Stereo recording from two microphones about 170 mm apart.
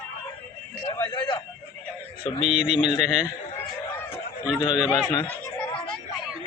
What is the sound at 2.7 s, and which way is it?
Speech, 5° right (ahead or behind).